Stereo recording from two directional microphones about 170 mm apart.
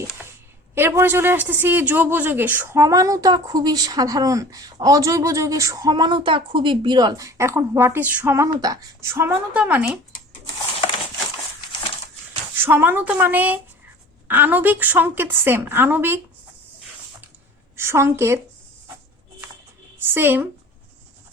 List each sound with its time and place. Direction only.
0.8 s a woman's voice: 15° right (ahead or behind)
12.6 s a woman's voice: 10° right (ahead or behind)
17.7 s a woman's voice: 15° right (ahead or behind)
20.1 s a woman's voice: 10° right (ahead or behind)